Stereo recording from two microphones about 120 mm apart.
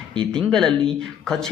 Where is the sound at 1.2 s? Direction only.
5° left (ahead or behind).